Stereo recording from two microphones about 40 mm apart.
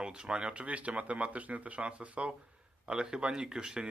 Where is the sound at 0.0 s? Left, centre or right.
Right.